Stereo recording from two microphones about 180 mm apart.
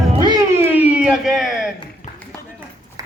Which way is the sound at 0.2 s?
20° right (ahead or behind).